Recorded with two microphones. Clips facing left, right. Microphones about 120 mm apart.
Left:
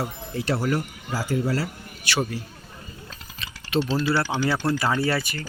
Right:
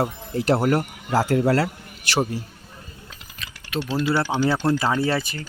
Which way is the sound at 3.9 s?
15° right (ahead or behind).